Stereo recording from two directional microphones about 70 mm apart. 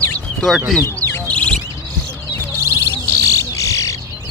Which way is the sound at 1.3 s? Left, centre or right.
Centre.